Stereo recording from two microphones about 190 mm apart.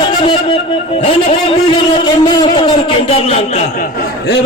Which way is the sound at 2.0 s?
25° left (ahead or behind).